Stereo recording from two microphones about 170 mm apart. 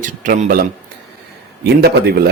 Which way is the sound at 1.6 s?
70° right (ahead or behind).